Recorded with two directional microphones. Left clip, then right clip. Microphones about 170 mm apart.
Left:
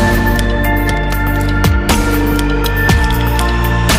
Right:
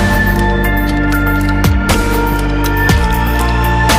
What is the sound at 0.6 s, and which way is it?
Music, centre (ahead or behind).